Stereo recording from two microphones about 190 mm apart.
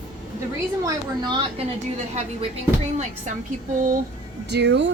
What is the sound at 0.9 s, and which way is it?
Speech, 25° right (ahead or behind).